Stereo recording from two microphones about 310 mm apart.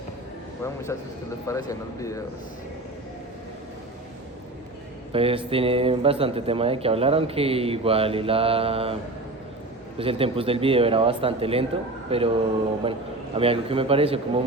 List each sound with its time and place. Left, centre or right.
1.5 s speech: centre
5.1 s speech: centre
10.0 s speech: centre